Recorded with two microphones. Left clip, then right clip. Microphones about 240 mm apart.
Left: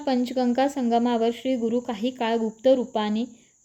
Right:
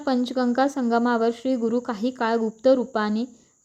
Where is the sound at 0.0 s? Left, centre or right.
Centre.